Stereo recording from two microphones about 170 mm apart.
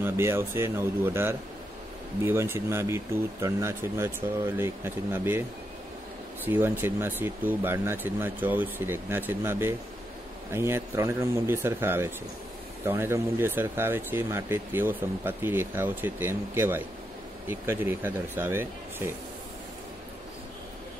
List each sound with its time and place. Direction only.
0.0 s speech: 15° right (ahead or behind)
6.4 s speech: 10° right (ahead or behind)